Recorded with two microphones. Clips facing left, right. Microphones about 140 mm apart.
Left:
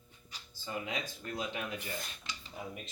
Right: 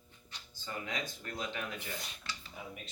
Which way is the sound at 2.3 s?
15° left (ahead or behind).